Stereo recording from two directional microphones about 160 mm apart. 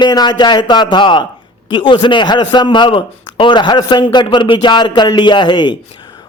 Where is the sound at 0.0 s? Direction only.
25° left (ahead or behind).